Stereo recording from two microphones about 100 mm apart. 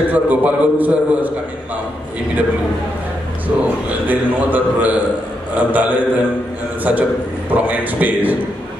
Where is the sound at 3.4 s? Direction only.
15° right (ahead or behind).